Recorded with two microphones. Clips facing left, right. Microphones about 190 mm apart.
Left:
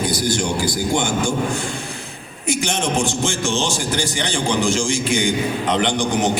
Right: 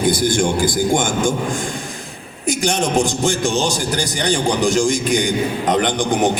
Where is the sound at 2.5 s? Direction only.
40° right (ahead or behind).